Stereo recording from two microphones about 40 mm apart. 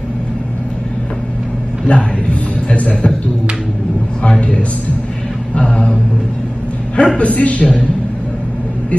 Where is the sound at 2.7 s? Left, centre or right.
Left.